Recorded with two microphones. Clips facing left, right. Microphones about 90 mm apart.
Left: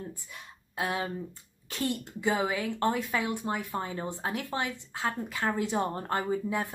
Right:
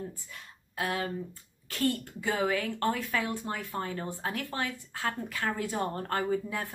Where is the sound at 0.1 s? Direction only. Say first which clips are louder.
Left 2 dB; 20° left (ahead or behind).